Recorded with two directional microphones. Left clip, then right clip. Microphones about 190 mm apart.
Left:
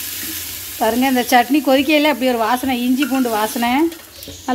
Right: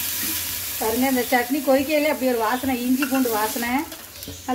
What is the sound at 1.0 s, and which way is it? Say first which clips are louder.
Speech: left 7 dB; 55° left (ahead or behind).